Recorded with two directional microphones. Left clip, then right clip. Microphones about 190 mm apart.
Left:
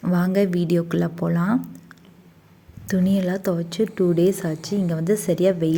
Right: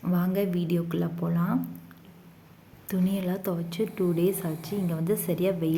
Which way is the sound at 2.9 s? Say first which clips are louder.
Left 7 dB; 35° left (ahead or behind).